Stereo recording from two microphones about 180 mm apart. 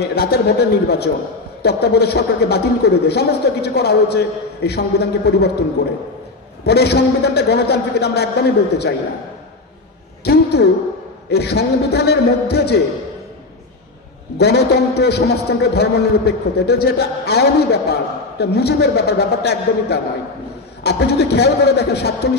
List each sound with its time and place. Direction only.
0.0 s a man's voice: 60° left (ahead or behind)
10.2 s a sound: 60° left (ahead or behind)
11.2 s a man's voice: 65° left (ahead or behind)
14.4 s a man's voice: 65° left (ahead or behind)